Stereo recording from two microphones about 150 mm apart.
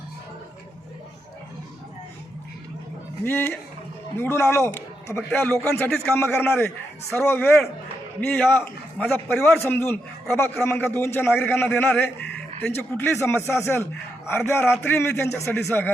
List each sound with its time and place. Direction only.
3.2 s a man's voice: 15° left (ahead or behind)